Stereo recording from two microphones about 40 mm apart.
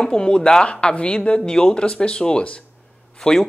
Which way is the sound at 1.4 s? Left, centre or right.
Centre.